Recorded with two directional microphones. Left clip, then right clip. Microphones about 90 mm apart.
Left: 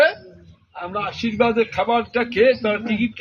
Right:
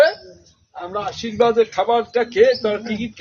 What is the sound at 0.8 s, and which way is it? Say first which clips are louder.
A man's voice: even; 20° right (ahead or behind).